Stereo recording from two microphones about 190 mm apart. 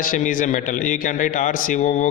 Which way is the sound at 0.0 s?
45° left (ahead or behind).